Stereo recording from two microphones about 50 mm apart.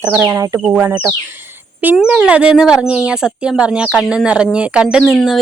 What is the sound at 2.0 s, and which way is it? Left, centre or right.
Speech, right.